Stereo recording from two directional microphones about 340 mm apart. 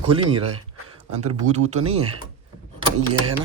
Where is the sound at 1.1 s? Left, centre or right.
Right.